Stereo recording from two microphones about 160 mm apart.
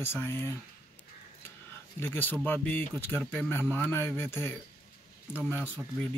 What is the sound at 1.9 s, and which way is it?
Speech, 10° left (ahead or behind).